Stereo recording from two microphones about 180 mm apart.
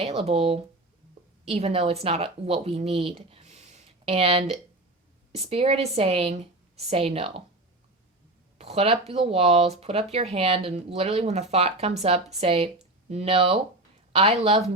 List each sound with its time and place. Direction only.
0.0 s speech: 35° right (ahead or behind)
8.5 s speech: 35° right (ahead or behind)